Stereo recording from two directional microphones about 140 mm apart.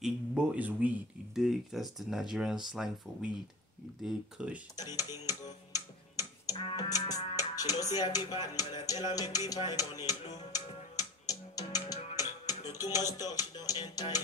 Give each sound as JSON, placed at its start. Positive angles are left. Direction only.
{"t": 0.0, "sound": "speech", "side_deg": -10}
{"t": 4.7, "sound": "speech", "side_deg": 25}
{"t": 6.4, "sound": "speech", "side_deg": 25}
{"t": 10.3, "sound": "music", "side_deg": 25}
{"t": 12.8, "sound": "speech", "side_deg": 25}